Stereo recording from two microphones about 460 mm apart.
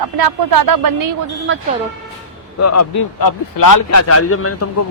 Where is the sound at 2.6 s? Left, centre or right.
Left.